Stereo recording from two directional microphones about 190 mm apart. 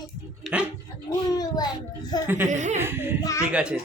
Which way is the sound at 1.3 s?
20° left (ahead or behind).